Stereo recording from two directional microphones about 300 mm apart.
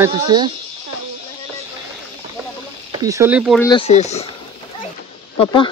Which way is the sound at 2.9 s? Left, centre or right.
Centre.